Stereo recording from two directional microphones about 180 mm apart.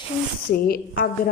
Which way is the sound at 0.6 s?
55° left (ahead or behind).